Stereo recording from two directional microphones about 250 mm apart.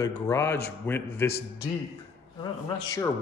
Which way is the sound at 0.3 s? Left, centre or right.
Centre.